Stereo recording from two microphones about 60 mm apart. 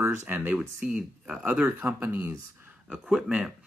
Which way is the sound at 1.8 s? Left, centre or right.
Right.